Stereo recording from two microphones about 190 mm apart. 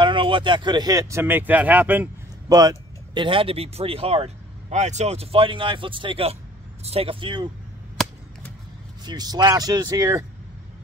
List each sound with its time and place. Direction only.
0.0 s speech: 25° right (ahead or behind); by 2.0 s 10° right (ahead or behind)
2.5 s speech: 20° right (ahead or behind)
9.0 s speech: 20° right (ahead or behind)